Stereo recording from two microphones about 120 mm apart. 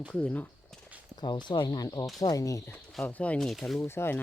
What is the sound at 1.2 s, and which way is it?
Speech, 40° left (ahead or behind).